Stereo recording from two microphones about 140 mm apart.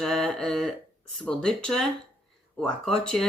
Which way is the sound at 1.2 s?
5° left (ahead or behind).